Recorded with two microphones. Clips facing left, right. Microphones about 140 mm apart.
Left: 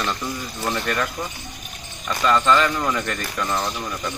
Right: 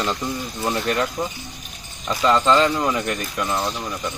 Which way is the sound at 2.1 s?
25° right (ahead or behind).